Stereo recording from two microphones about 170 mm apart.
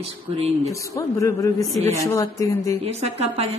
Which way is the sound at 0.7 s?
20° left (ahead or behind).